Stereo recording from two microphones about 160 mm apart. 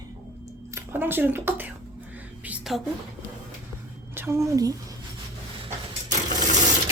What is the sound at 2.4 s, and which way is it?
Whispering, 5° right (ahead or behind).